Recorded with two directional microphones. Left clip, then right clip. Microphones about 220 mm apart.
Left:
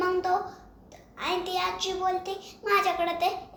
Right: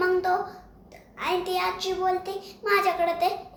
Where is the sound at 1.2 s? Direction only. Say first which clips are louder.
Right 2 dB; 15° right (ahead or behind).